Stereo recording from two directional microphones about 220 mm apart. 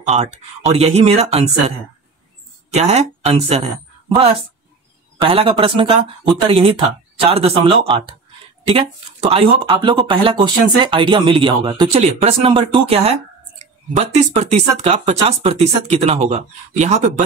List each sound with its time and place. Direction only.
0.1 s speech: 30° right (ahead or behind)
2.7 s speech: 30° right (ahead or behind)